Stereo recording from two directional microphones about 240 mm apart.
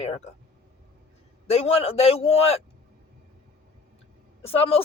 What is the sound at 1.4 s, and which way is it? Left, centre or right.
A man's voice, left.